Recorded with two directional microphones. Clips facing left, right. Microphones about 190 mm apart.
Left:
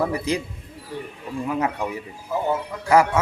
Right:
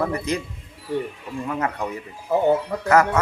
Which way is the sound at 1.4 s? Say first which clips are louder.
Left 1 dB; 10° left (ahead or behind).